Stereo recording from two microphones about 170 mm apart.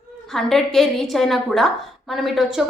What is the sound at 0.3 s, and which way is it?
Speech, centre (ahead or behind).